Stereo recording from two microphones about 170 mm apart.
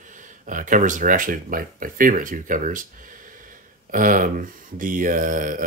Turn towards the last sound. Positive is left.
turn(degrees=-50)  # may be behind; listen again after turning